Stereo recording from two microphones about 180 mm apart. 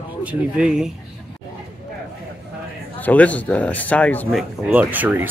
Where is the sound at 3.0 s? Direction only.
10° left (ahead or behind).